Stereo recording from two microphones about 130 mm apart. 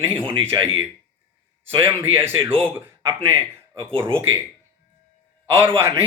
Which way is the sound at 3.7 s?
40° right (ahead or behind).